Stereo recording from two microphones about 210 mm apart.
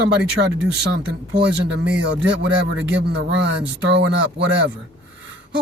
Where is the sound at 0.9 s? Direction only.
55° right (ahead or behind).